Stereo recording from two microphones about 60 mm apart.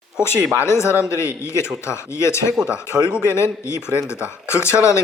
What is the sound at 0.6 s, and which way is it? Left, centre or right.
Speech, left.